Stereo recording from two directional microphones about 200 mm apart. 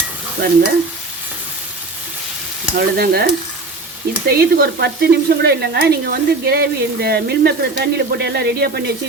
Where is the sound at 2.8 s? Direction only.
50° right (ahead or behind).